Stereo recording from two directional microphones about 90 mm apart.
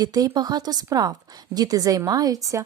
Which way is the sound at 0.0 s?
45° right (ahead or behind).